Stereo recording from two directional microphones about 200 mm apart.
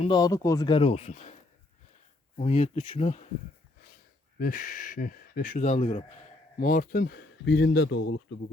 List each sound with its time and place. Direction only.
0.0 s speech: 20° left (ahead or behind)
2.4 s speech: 30° left (ahead or behind)
4.4 s speech: 45° left (ahead or behind); by 8.4 s 60° left (ahead or behind)